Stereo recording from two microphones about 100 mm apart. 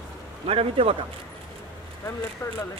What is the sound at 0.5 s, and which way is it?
Speech, 75° right (ahead or behind).